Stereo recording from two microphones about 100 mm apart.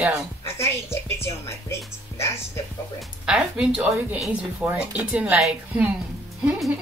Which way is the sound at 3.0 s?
5° right (ahead or behind).